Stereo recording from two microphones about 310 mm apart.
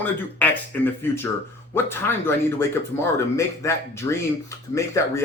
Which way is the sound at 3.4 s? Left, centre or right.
Centre.